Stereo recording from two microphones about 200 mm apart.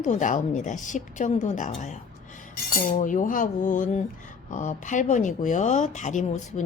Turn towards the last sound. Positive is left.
turn(degrees=40)  # may be behind; listen again after turning